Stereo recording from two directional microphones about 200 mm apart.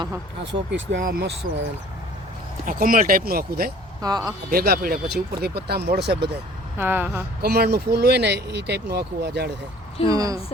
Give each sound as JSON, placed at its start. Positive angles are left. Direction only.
{"t": 0.7, "sound": "speech", "side_deg": -65}
{"t": 1.0, "sound": "speech", "side_deg": -45}
{"t": 2.6, "sound": "speech", "side_deg": -45}
{"t": 4.0, "sound": "speech", "side_deg": -20}
{"t": 4.5, "sound": "speech", "side_deg": -50}
{"t": 6.7, "sound": "speech", "side_deg": -10}
{"t": 7.4, "sound": "speech", "side_deg": -55}
{"t": 10.1, "sound": "speech", "side_deg": -15}